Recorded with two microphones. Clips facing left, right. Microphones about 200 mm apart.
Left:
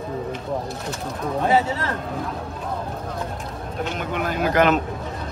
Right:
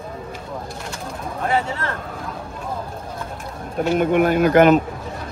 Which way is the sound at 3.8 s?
55° right (ahead or behind).